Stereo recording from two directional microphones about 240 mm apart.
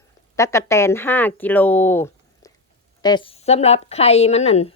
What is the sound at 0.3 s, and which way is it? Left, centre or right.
A woman's voice, centre.